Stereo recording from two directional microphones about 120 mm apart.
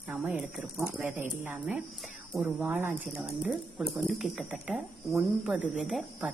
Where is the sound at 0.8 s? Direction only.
15° right (ahead or behind).